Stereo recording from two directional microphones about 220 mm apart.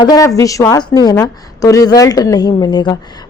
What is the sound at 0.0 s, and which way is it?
A woman's voice, 15° left (ahead or behind).